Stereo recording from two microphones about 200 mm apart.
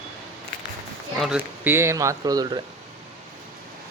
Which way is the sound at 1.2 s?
5° right (ahead or behind).